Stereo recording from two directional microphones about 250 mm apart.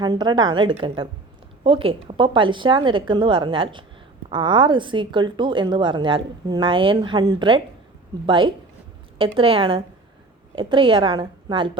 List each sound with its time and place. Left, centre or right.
0.0 s speech: centre